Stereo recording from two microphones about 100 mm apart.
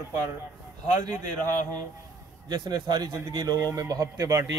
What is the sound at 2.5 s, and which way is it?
Speech, 45° right (ahead or behind).